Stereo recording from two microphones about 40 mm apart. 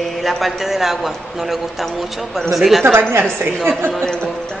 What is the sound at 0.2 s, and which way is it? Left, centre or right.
A woman's voice, centre.